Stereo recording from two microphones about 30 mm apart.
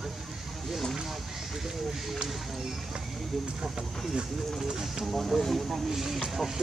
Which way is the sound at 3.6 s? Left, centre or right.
Right.